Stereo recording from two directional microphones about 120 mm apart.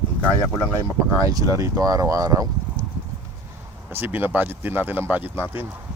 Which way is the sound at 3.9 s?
15° right (ahead or behind).